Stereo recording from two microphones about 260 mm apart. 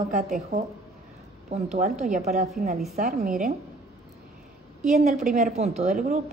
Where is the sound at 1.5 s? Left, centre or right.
Right.